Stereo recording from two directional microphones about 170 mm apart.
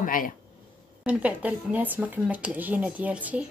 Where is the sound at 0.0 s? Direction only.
55° left (ahead or behind).